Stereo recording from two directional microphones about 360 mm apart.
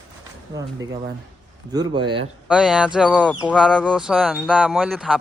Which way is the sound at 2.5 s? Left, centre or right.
Centre.